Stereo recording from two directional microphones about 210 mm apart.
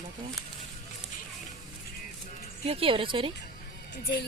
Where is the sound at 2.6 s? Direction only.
25° right (ahead or behind).